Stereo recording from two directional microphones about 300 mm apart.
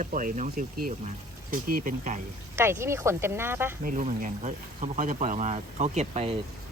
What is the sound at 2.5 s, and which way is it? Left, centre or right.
Speech, centre.